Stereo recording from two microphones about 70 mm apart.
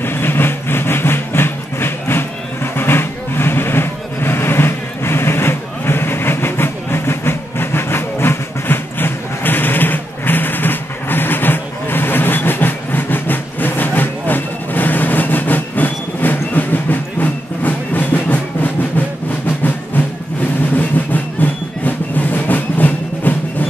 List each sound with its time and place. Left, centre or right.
0.0 s train: left
20.7 s music: left